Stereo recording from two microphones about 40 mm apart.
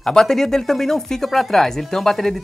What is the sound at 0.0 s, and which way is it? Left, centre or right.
Speech, centre.